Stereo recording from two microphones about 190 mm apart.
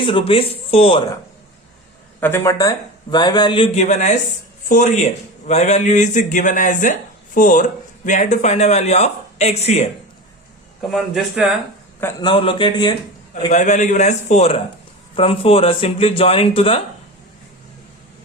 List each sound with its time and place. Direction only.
0.0 s a man's voice: 25° left (ahead or behind)
2.2 s a man's voice: 15° left (ahead or behind); by 9.8 s 35° left (ahead or behind)
10.8 s speech: centre (ahead or behind)
12.2 s a man's voice: 25° left (ahead or behind)
13.5 s speech: 40° left (ahead or behind)